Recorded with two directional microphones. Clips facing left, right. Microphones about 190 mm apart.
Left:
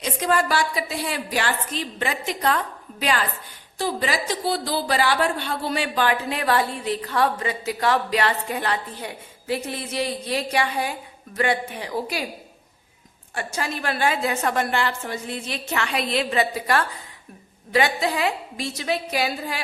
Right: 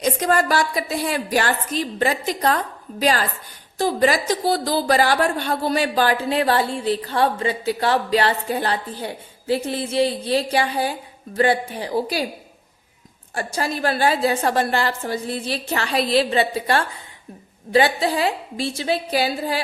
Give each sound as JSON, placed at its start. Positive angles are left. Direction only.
{"t": 0.0, "sound": "speech", "side_deg": -45}
{"t": 13.3, "sound": "speech", "side_deg": -35}